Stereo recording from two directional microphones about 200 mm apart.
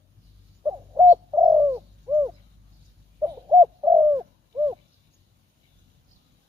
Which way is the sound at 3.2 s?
20° right (ahead or behind).